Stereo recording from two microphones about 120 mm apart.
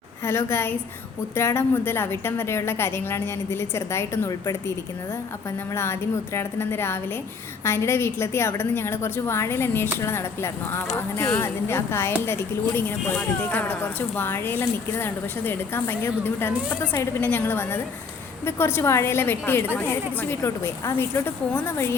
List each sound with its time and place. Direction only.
0.3 s a woman's voice: 20° left (ahead or behind)
5.7 s a woman's voice: 20° left (ahead or behind)